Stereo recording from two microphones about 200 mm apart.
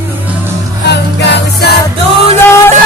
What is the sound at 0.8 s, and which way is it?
Music, 55° left (ahead or behind).